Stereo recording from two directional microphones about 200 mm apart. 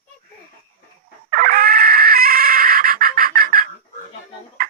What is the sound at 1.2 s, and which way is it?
Chicken, 45° right (ahead or behind).